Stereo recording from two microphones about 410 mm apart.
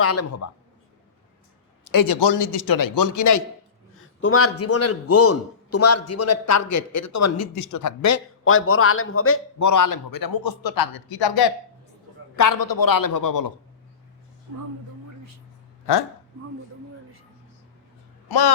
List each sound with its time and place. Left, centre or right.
0.0 s a man's voice: left
1.9 s a man's voice: left
2.1 s speech: left
4.2 s a man's voice: left
9.6 s speech: left
12.4 s speech: left
18.3 s speech: left